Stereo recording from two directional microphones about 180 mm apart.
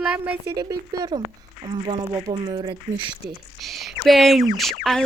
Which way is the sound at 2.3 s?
25° right (ahead or behind).